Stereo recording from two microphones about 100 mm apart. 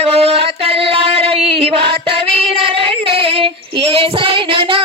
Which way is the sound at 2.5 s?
65° right (ahead or behind).